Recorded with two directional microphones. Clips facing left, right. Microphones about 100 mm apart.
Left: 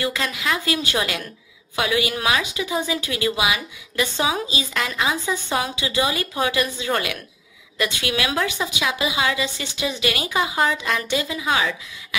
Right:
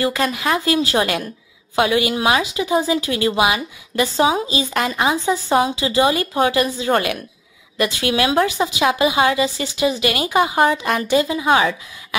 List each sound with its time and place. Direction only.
0.0 s a woman's voice: 35° right (ahead or behind)